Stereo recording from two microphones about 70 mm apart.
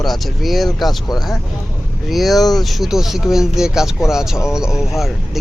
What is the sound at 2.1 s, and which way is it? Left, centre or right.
Speech, centre.